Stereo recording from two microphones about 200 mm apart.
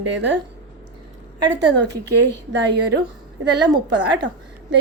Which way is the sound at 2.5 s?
60° right (ahead or behind).